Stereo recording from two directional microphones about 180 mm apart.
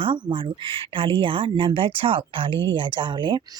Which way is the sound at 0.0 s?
30° right (ahead or behind).